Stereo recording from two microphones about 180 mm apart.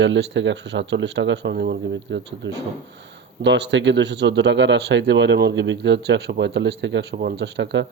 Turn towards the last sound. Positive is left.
turn(degrees=-75)  # may be behind; listen again after turning